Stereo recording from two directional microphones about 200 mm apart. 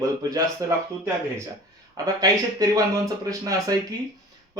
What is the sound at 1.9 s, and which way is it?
Speech, 20° right (ahead or behind).